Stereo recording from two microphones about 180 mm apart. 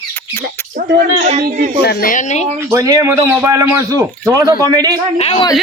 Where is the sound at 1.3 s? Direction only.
45° right (ahead or behind).